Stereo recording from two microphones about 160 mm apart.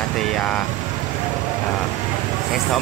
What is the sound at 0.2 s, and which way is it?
Speech, 5° left (ahead or behind).